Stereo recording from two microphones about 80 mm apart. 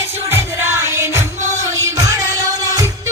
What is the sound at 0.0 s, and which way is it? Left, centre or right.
Music, right.